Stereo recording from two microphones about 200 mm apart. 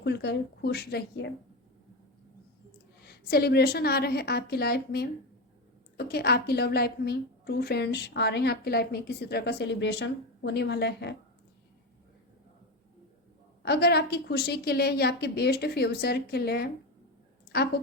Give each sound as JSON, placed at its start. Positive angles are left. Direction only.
{"t": 0.0, "sound": "a woman's voice", "side_deg": 55}
{"t": 3.0, "sound": "a woman's voice", "side_deg": 50}
{"t": 13.6, "sound": "a woman's voice", "side_deg": 55}